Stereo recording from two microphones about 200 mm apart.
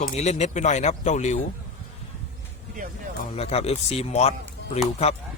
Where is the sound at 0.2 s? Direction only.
35° left (ahead or behind).